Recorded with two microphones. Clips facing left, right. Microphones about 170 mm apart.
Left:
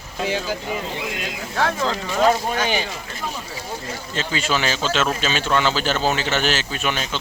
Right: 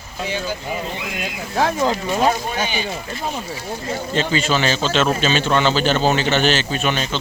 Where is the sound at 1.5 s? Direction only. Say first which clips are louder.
Right 4 dB; 15° right (ahead or behind).